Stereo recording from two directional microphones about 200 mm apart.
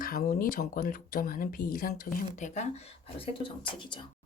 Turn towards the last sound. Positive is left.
turn(degrees=25)  # may be behind; listen again after turning